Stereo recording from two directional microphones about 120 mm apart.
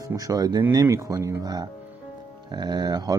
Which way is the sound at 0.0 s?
30° right (ahead or behind).